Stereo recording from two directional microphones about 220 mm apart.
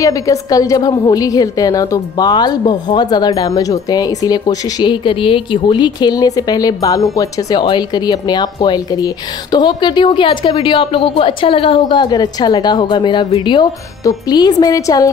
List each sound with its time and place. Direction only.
0.0 s a woman's voice: 15° left (ahead or behind)